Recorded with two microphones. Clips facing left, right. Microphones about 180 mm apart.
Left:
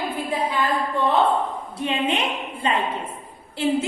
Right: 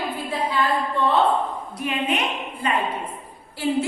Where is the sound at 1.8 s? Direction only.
25° left (ahead or behind).